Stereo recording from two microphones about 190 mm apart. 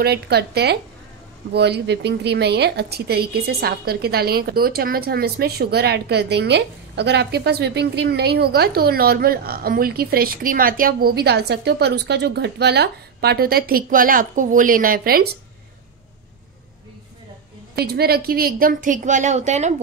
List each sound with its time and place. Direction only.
0.0 s a woman's voice: 55° right (ahead or behind)
17.7 s a woman's voice: 55° right (ahead or behind); by 19.7 s 35° right (ahead or behind)